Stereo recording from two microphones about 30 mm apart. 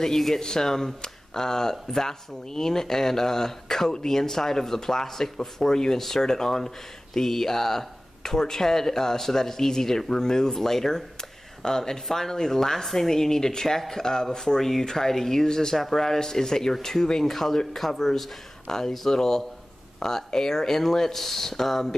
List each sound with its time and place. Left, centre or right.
0.0 s speech: centre
15.7 s speech: centre